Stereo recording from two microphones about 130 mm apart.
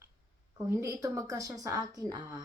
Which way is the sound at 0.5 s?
20° right (ahead or behind).